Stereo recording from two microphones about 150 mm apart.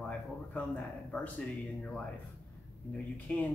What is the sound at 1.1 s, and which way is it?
Speech, 5° left (ahead or behind).